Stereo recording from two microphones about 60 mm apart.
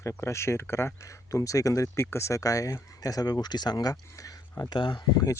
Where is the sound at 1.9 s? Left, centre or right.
Left.